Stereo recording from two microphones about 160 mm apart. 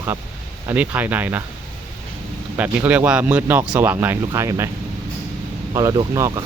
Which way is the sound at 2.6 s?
10° right (ahead or behind).